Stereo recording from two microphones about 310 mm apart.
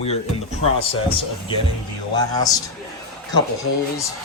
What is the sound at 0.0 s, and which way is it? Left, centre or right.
Speech, centre.